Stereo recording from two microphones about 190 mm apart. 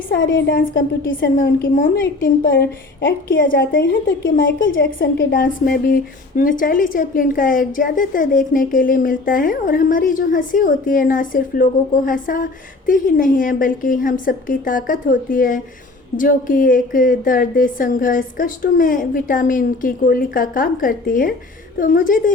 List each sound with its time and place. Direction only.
0.2 s a woman's voice: 70° left (ahead or behind)
0.5 s a woman's voice: 45° left (ahead or behind)
3.8 s a woman's voice: 50° left (ahead or behind)
4.6 s a woman's voice: 85° left
4.9 s a woman's voice: 50° left (ahead or behind)